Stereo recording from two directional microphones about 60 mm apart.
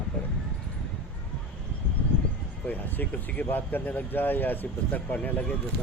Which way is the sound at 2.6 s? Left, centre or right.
Left.